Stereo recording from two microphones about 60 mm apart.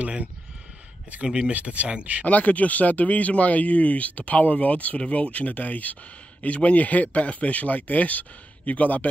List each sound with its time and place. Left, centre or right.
1.2 s speech: centre
2.2 s speech: left